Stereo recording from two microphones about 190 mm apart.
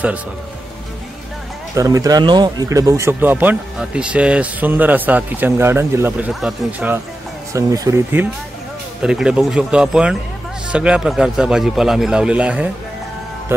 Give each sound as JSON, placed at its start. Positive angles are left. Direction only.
{"t": 1.8, "sound": "speech", "side_deg": -20}
{"t": 7.5, "sound": "a man's voice", "side_deg": -15}